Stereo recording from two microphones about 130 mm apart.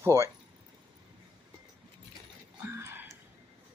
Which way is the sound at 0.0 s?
20° right (ahead or behind).